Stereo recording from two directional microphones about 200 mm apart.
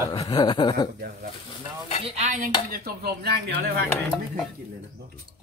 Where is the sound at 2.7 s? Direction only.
50° right (ahead or behind).